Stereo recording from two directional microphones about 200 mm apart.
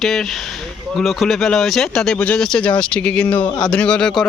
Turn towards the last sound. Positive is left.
turn(degrees=5)  # may be behind; listen again after turning